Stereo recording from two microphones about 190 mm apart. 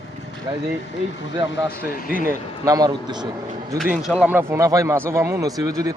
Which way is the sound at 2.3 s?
20° right (ahead or behind).